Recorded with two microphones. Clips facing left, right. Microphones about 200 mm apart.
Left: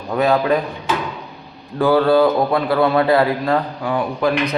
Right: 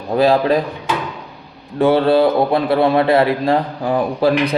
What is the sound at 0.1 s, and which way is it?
Speech, 30° right (ahead or behind).